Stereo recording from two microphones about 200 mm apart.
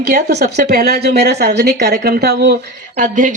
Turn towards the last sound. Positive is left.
turn(degrees=-40)  # may be behind; listen again after turning